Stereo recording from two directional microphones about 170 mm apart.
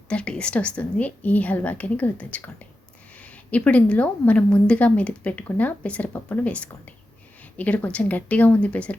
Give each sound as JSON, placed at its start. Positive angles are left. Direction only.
{"t": 0.1, "sound": "a woman's voice", "side_deg": 5}